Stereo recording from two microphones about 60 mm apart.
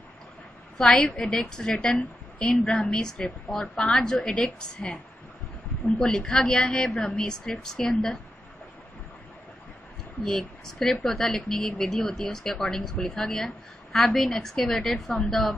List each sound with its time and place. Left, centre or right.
0.7 s a woman's voice: centre
10.2 s a woman's voice: centre